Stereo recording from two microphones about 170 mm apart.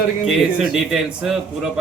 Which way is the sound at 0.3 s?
Centre (ahead or behind).